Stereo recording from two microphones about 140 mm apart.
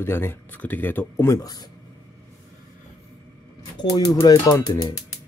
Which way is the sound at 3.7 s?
30° left (ahead or behind).